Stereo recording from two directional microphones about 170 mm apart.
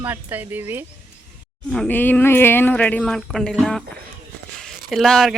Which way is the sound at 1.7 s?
5° left (ahead or behind).